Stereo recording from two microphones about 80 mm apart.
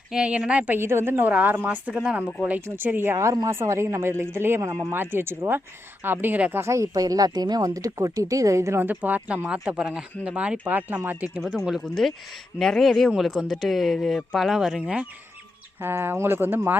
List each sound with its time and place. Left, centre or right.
0.1 s speech: centre
0.8 s speech: right; by 2.2 s centre
2.4 s speech: right
6.6 s speech: right
8.8 s speech: right; by 14.8 s centre
15.8 s speech: right